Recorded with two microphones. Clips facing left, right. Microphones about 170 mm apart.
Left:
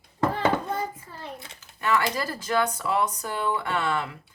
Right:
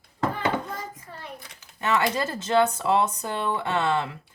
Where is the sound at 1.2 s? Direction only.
25° left (ahead or behind).